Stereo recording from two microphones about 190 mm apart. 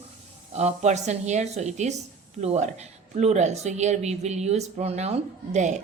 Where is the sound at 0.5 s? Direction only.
35° right (ahead or behind).